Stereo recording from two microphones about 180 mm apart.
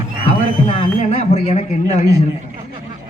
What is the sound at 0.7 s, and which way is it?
A man's voice, 35° left (ahead or behind).